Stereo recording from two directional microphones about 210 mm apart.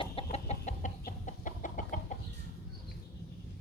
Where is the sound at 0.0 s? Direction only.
30° left (ahead or behind).